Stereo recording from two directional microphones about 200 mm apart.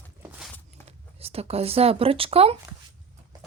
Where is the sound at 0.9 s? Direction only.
30° right (ahead or behind).